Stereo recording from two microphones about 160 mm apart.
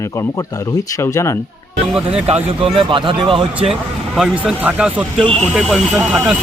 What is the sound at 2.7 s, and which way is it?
Speech, 30° right (ahead or behind).